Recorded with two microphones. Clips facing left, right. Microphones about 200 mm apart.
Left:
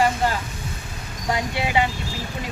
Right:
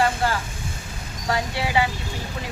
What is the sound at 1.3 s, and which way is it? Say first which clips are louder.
Speech: even; 20° left (ahead or behind).